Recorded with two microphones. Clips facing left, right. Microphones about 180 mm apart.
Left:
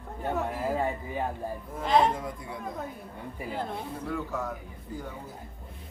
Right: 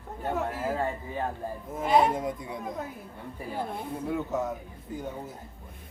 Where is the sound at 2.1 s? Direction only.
20° right (ahead or behind).